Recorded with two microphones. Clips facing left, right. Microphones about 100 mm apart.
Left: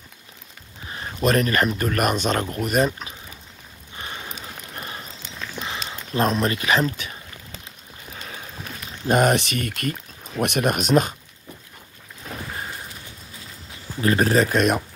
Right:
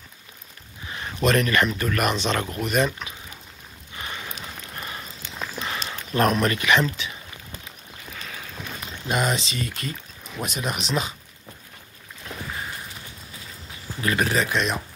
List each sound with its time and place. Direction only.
0.8 s speech: 35° left (ahead or behind)
5.7 s speech: 20° left (ahead or behind); by 7.2 s 40° left (ahead or behind)
8.1 s boat: 30° left (ahead or behind)
9.1 s speech: 60° left (ahead or behind)
14.0 s speech: 35° left (ahead or behind)